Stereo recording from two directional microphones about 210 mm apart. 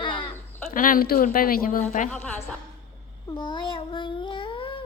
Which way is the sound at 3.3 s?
20° left (ahead or behind).